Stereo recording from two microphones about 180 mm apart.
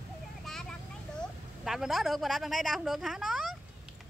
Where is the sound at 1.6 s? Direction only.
Centre (ahead or behind).